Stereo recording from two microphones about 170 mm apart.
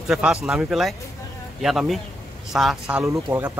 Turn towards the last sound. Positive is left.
turn(degrees=-15)  # may be behind; listen again after turning